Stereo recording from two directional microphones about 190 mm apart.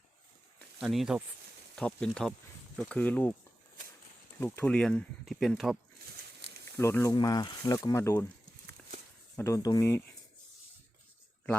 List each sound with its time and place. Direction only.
0.8 s speech: 5° right (ahead or behind)
4.4 s speech: 10° left (ahead or behind)
6.7 s speech: 15° left (ahead or behind)
9.3 s speech: 15° left (ahead or behind)